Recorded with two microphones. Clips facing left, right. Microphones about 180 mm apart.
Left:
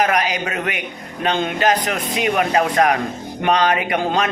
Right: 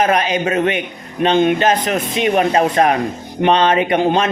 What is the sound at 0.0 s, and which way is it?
Speech, 25° right (ahead or behind).